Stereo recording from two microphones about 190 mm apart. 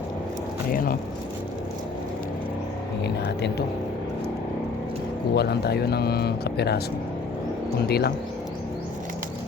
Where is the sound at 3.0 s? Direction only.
60° left (ahead or behind).